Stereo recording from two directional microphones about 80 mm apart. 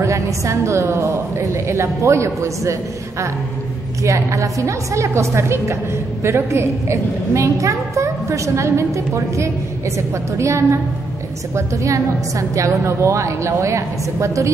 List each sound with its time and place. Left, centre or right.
0.0 s a woman's voice: right